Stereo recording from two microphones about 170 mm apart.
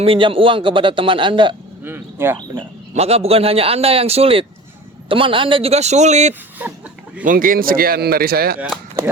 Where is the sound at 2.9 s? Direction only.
35° right (ahead or behind).